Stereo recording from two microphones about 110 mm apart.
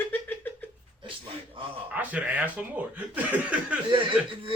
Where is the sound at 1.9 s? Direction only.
15° right (ahead or behind).